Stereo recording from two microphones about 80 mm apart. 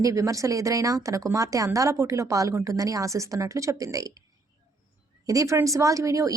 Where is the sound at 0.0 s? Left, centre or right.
Right.